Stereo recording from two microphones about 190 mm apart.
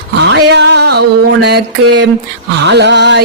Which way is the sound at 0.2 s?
60° right (ahead or behind).